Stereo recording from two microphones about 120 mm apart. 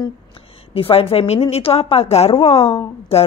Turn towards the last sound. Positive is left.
turn(degrees=55)  # may be behind; listen again after turning